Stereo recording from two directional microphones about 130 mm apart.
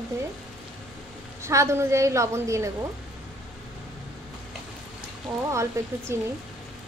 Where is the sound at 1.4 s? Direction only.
20° right (ahead or behind).